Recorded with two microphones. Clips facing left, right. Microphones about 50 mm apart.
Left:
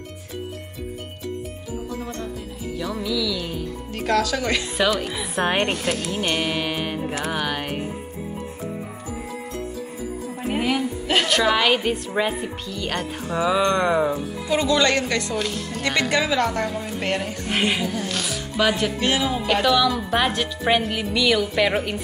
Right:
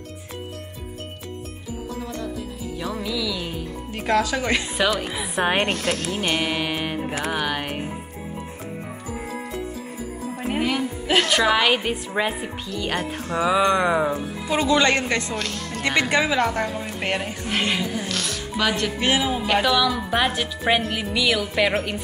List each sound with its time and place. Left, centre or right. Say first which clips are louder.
2.8 s a woman's voice: left 2 dB; centre
4.7 s a woman's voice: left 1 dB; centre
5.8 s a woman's voice: even; centre
10.5 s a woman's voice: left 1 dB; centre
14.1 s speech: left 1 dB; right
15.3 s speech: left 2 dB; centre
15.8 s speech: right 1 dB; right
17.5 s a woman's voice: left 1 dB; centre
18.9 s a woman's voice: even; centre